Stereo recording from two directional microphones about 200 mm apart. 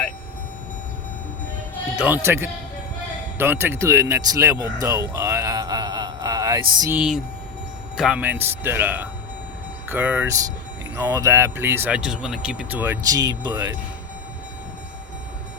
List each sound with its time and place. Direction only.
2.0 s speech: 10° right (ahead or behind)
7.9 s speech: 5° right (ahead or behind)